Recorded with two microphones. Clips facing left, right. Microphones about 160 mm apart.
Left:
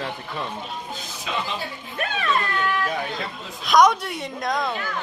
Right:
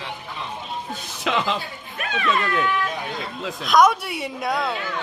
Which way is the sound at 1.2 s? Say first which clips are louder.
Right 6 dB; 90° right.